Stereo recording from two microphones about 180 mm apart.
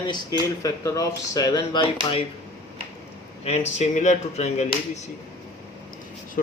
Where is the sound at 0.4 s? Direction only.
20° left (ahead or behind).